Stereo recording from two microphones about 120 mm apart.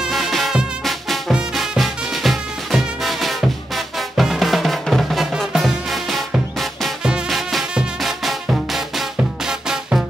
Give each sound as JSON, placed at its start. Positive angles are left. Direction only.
{"t": 0.0, "sound": "music", "side_deg": 0}